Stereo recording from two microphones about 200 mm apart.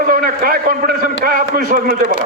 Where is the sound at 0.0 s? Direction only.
45° right (ahead or behind).